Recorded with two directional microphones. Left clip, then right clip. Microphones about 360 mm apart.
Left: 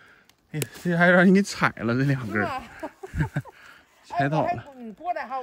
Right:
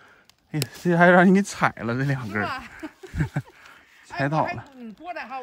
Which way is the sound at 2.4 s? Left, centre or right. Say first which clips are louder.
Even; centre.